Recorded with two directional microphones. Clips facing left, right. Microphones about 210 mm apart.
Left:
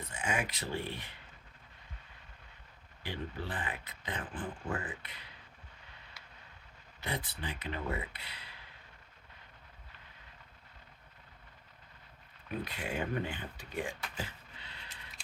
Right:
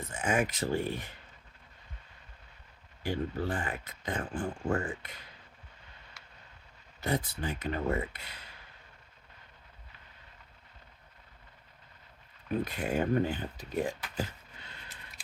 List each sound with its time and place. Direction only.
0.1 s speech: 45° right (ahead or behind)
3.0 s speech: 45° right (ahead or behind)
7.0 s speech: 45° right (ahead or behind)
12.6 s speech: 45° right (ahead or behind)
14.6 s a sound: 50° right (ahead or behind)